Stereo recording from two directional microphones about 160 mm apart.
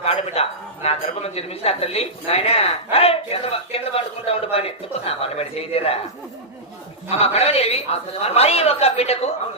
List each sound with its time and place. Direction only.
0.0 s speech: 40° left (ahead or behind)
7.1 s speech: 40° left (ahead or behind)